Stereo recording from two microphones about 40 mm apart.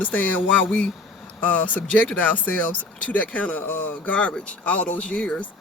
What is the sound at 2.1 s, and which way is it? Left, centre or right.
Speech, left.